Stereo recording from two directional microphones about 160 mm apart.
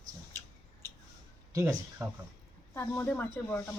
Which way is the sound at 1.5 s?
20° right (ahead or behind).